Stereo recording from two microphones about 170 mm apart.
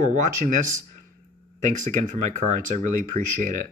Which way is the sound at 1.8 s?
45° right (ahead or behind).